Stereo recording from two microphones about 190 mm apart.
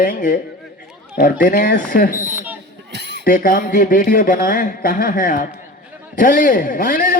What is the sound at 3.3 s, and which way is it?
Speech, 45° left (ahead or behind).